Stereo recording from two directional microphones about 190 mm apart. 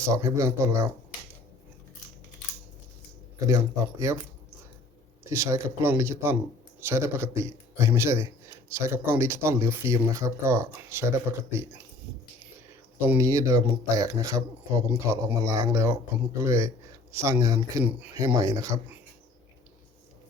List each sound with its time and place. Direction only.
0.0 s speech: 15° right (ahead or behind)
3.4 s speech: 15° right (ahead or behind)
5.3 s speech: 15° right (ahead or behind)
13.0 s speech: 15° right (ahead or behind)